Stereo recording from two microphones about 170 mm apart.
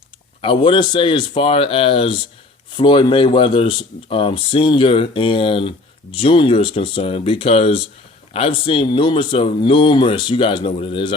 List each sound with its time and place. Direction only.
0.4 s speech: 30° left (ahead or behind)